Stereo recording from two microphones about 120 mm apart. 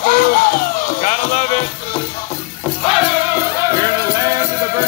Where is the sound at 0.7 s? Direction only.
85° left; by 1.7 s 65° left (ahead or behind).